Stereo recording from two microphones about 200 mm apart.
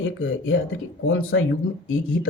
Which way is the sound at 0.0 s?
75° left (ahead or behind).